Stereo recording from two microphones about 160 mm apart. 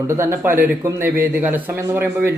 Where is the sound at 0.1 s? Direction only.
15° right (ahead or behind).